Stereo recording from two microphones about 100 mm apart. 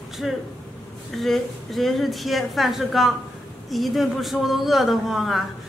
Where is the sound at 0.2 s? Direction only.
5° right (ahead or behind).